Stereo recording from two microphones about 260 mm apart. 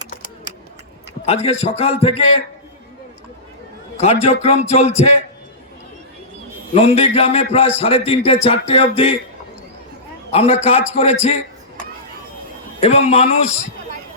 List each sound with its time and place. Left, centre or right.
1.2 s a man's voice: left
4.0 s a man's voice: left
6.7 s a man's voice: left
10.3 s a man's voice: left
12.8 s a man's voice: left